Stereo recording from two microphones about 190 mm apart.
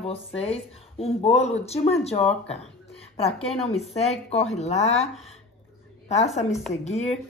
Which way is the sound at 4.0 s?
35° left (ahead or behind).